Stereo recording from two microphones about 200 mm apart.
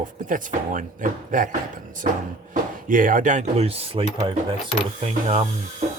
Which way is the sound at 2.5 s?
40° right (ahead or behind).